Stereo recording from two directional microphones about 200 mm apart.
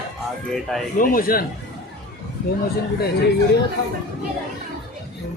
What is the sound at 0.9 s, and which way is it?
Speech, 45° left (ahead or behind).